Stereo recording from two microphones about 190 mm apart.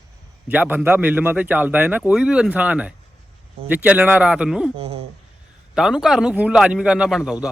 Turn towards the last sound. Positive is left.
turn(degrees=0)  # may be behind; listen again after turning